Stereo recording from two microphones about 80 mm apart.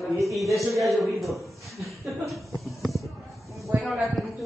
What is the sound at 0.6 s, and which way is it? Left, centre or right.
Speech, right.